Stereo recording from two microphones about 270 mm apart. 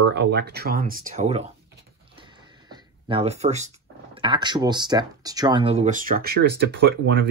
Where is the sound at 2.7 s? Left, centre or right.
Centre.